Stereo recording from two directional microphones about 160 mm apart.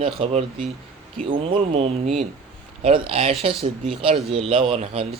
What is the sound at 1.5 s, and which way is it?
Speech, 35° right (ahead or behind).